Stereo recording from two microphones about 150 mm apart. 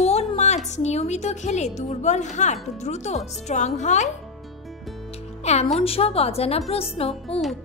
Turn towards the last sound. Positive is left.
turn(degrees=40)  # may be behind; listen again after turning